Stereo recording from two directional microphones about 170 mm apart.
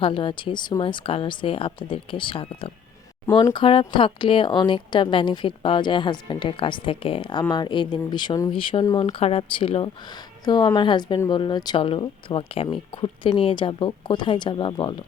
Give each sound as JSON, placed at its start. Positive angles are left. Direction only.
{"t": 0.0, "sound": "a woman's voice", "side_deg": 30}
{"t": 9.0, "sound": "a woman's voice", "side_deg": 35}